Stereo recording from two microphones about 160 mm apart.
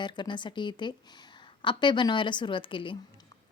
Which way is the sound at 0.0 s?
30° left (ahead or behind).